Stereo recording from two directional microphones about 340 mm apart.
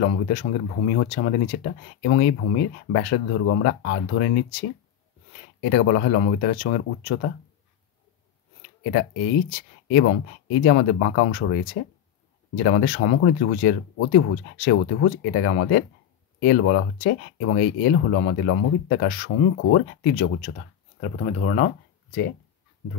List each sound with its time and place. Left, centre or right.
0.0 s speech: left
5.6 s speech: left
9.5 s speech: left